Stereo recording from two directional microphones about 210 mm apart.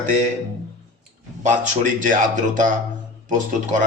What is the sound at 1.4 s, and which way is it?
Speech, 35° right (ahead or behind).